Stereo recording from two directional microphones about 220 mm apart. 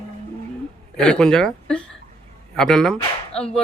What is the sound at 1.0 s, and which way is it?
A woman's voice, 5° left (ahead or behind).